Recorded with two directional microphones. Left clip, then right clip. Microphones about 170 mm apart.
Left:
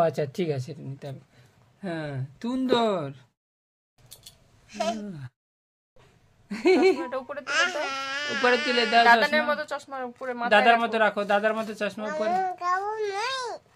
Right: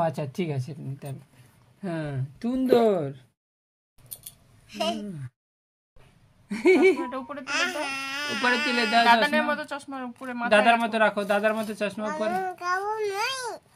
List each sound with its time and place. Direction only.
0.0 s speech: 35° left (ahead or behind); by 2.2 s 15° left (ahead or behind)
2.3 s speech: 30° left (ahead or behind)
4.2 s a sound: 20° left (ahead or behind)
6.5 s speech: 10° left (ahead or behind)
7.0 s speech: 30° left (ahead or behind)
7.4 s speech: 10° left (ahead or behind)
9.2 s speech: 25° left (ahead or behind)
10.5 s speech: 10° left (ahead or behind)